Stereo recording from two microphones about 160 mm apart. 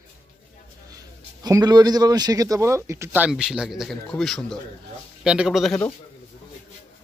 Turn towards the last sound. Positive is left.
turn(degrees=0)  # may be behind; listen again after turning